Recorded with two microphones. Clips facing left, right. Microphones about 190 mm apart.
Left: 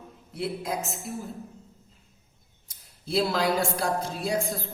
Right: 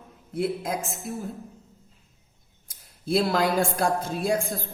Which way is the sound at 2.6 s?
50° right (ahead or behind).